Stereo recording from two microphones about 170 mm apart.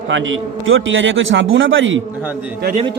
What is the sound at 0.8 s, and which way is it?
A man's voice, 90° right.